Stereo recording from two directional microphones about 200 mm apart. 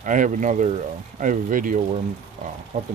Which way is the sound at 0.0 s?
40° right (ahead or behind).